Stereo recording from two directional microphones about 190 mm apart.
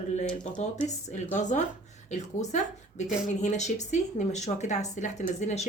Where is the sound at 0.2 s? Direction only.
40° left (ahead or behind).